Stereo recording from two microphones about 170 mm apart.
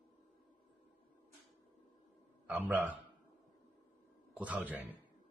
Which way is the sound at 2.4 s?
10° right (ahead or behind).